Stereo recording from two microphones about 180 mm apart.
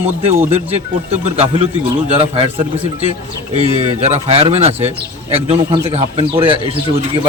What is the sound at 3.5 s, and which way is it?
Speech, 35° right (ahead or behind).